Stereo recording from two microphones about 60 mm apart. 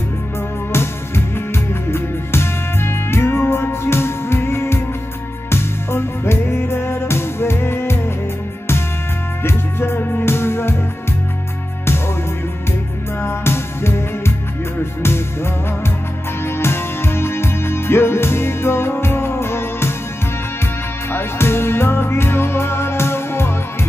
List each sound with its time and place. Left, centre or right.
0.7 s music: left
9.4 s music: left
13.2 s music: left
16.4 s music: left
21.1 s music: left